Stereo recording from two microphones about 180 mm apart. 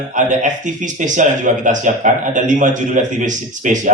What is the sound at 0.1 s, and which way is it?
Speech, 45° right (ahead or behind).